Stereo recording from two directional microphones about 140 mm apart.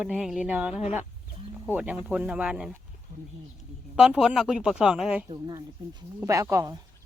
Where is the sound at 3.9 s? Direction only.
5° right (ahead or behind).